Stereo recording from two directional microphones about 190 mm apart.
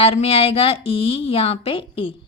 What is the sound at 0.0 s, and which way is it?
Speech, 30° left (ahead or behind).